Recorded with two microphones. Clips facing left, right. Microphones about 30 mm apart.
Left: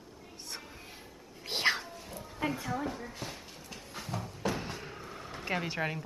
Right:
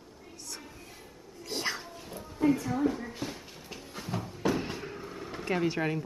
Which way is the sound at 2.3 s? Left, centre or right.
Left.